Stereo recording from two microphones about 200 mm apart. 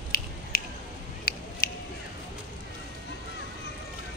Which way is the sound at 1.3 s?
50° left (ahead or behind).